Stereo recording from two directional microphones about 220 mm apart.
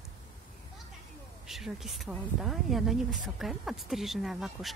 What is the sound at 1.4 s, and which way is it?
Speech, centre (ahead or behind).